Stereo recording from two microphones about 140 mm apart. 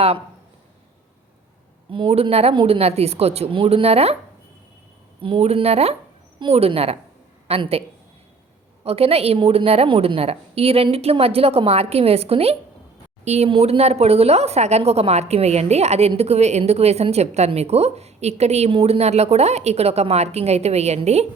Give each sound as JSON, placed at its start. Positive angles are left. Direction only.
{"t": 1.9, "sound": "a woman's voice", "side_deg": -40}
{"t": 5.2, "sound": "a woman's voice", "side_deg": -45}